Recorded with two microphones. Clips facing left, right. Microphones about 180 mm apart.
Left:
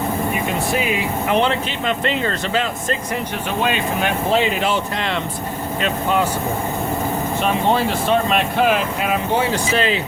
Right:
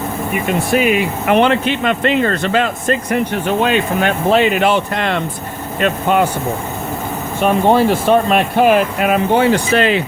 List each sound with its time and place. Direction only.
0.7 s speech: 65° right (ahead or behind)
7.4 s speech: 50° right (ahead or behind)